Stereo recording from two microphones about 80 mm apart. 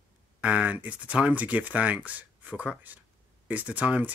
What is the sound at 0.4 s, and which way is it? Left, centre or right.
Speech, centre.